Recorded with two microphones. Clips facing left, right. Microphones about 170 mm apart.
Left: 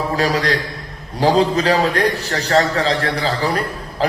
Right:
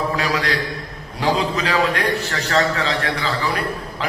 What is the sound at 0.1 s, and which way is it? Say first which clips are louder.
A man's voice: left 4 dB; 35° left (ahead or behind).